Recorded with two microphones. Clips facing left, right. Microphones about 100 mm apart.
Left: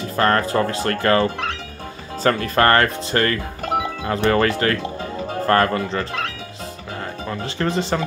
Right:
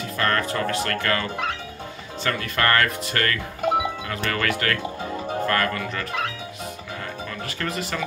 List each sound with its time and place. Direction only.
0.0 s speech: 35° left (ahead or behind)
7.2 s speech: 30° left (ahead or behind)